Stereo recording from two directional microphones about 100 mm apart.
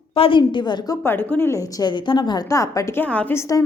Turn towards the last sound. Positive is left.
turn(degrees=30)  # may be behind; listen again after turning